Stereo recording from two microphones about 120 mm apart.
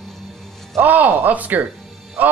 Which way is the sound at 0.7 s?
15° right (ahead or behind).